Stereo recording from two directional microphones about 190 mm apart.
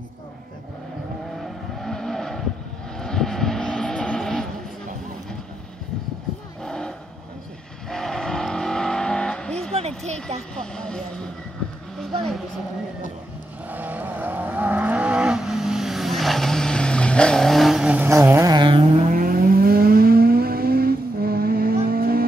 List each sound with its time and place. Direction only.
1.4 s vehicle: centre (ahead or behind)
6.6 s roaring cats: 5° left (ahead or behind)
7.9 s vehicle: 5° left (ahead or behind)
9.8 s a sound: 35° right (ahead or behind)
10.5 s vehicle: 5° left (ahead or behind)
12.0 s vehicle: centre (ahead or behind)
13.7 s vehicle: 10° right (ahead or behind)
19.0 s vehicle: 45° right (ahead or behind)